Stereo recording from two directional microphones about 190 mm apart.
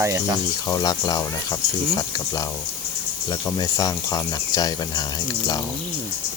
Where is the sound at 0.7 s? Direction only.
20° left (ahead or behind).